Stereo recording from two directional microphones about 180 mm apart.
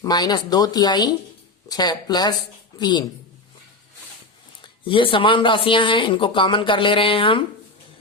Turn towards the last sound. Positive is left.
turn(degrees=30)  # may be behind; listen again after turning